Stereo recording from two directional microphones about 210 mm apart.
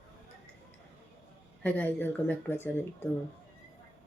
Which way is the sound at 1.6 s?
10° left (ahead or behind).